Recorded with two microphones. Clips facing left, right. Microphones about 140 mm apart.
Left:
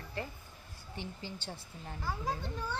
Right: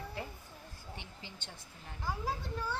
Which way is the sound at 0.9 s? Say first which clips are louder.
Left 9 dB; 35° left (ahead or behind).